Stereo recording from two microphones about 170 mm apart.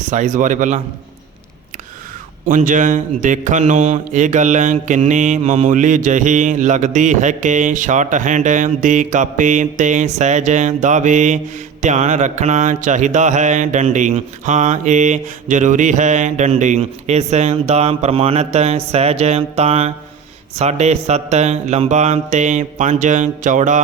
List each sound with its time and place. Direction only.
0.0 s speech: 45° right (ahead or behind)
2.5 s speech: 50° right (ahead or behind)
14.1 s mantra: 45° right (ahead or behind)
20.6 s speech: 40° right (ahead or behind)